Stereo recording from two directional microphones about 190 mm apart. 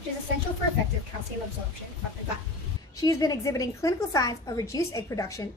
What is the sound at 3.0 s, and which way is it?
A woman's voice, 20° left (ahead or behind).